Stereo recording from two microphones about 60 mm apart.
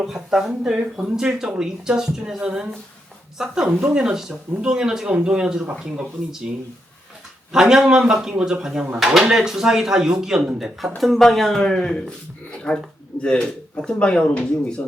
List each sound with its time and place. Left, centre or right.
0.0 s speech: centre
7.5 s speech: centre